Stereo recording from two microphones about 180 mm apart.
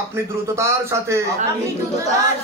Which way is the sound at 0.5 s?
15° right (ahead or behind).